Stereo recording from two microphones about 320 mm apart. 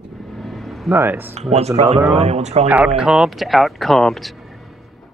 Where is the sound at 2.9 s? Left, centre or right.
Centre.